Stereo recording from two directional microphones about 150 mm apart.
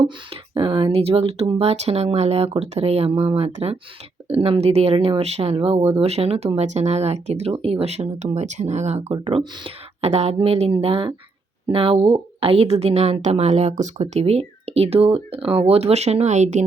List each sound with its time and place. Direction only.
0.5 s a woman's voice: 35° right (ahead or behind)
9.2 s a woman's voice: 35° right (ahead or behind)